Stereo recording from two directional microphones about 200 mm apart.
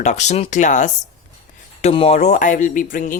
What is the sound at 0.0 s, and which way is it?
Speech, 35° left (ahead or behind).